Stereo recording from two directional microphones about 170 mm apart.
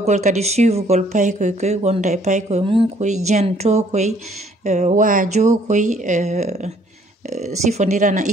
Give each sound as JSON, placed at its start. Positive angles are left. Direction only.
{"t": 0.0, "sound": "speech", "side_deg": -45}